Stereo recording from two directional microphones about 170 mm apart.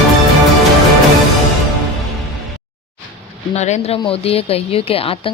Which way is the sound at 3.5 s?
40° left (ahead or behind).